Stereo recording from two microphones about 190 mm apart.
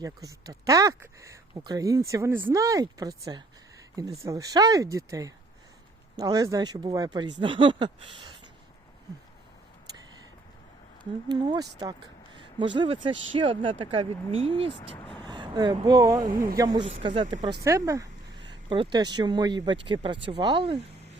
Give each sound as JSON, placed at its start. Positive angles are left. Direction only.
{"t": 0.0, "sound": "speech", "side_deg": -20}
{"t": 11.3, "sound": "speech", "side_deg": -20}
{"t": 17.6, "sound": "speech", "side_deg": -15}